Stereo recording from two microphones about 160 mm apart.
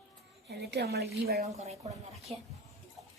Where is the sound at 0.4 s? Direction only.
90° right.